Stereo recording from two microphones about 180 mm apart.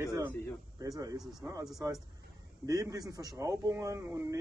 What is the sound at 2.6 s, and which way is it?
A man's voice, 20° right (ahead or behind).